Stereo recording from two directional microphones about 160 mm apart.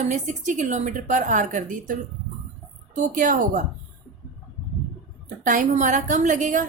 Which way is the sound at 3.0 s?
55° right (ahead or behind).